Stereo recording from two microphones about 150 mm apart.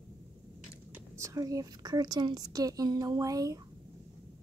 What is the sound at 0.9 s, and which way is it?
A woman's voice, 20° right (ahead or behind).